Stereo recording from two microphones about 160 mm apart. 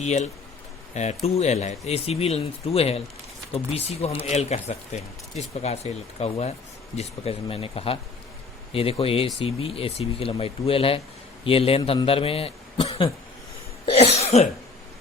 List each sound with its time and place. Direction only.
0.0 s speech: 45° left (ahead or behind)
13.8 s cough: 40° left (ahead or behind)